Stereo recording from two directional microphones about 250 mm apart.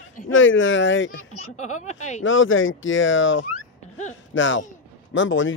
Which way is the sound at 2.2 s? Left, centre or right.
Left.